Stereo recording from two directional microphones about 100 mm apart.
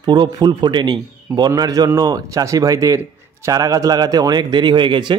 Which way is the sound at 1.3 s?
35° right (ahead or behind).